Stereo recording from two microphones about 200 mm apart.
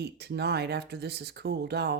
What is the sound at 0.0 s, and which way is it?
Speech, 55° right (ahead or behind).